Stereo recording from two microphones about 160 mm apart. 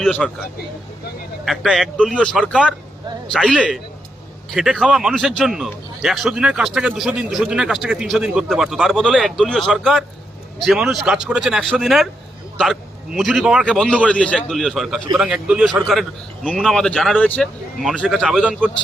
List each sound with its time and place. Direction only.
0.0 s a man's voice: centre (ahead or behind)
1.5 s a man's voice: centre (ahead or behind)
13.1 s a man's voice: 5° right (ahead or behind)